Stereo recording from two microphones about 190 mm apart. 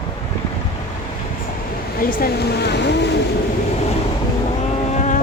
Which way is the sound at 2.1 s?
55° left (ahead or behind).